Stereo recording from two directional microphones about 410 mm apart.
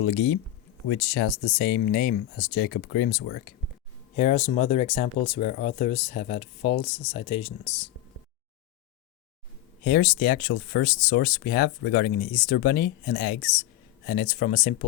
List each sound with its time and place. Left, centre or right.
0.0 s speech: left
9.8 s speech: left